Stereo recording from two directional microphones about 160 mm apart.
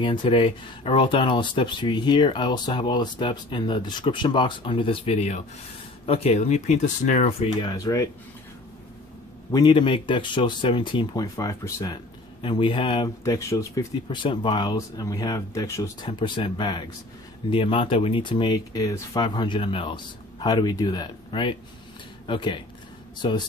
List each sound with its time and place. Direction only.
0.0 s speech: 30° left (ahead or behind)
7.7 s speech: 20° left (ahead or behind)
9.5 s speech: 30° left (ahead or behind)
13.2 s speech: 20° left (ahead or behind)
14.0 s speech: 30° left (ahead or behind)
16.1 s speech: 30° left (ahead or behind)